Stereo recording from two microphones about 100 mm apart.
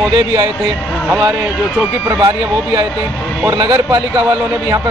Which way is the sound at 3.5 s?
40° right (ahead or behind).